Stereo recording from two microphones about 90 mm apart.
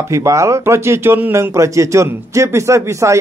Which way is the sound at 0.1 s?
35° right (ahead or behind).